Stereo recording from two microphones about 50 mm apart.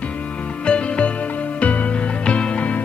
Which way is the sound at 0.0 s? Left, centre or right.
Left.